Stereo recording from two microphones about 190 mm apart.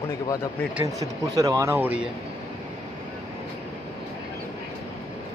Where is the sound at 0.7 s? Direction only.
15° right (ahead or behind).